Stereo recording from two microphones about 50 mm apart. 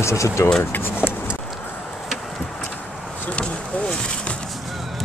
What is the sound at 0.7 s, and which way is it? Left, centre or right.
Speech, left.